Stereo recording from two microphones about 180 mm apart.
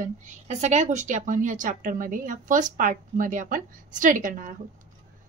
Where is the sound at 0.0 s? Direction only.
40° right (ahead or behind).